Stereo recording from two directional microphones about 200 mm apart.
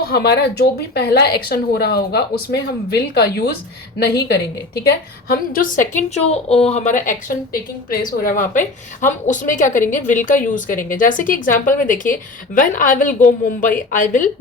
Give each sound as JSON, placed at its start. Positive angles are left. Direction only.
{"t": 0.1, "sound": "speech", "side_deg": 55}
{"t": 4.9, "sound": "a woman's voice", "side_deg": 45}